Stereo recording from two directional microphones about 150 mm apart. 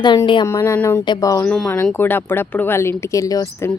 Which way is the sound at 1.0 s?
25° left (ahead or behind).